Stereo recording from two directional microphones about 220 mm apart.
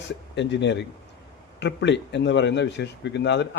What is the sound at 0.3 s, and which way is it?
A man's voice, 55° left (ahead or behind).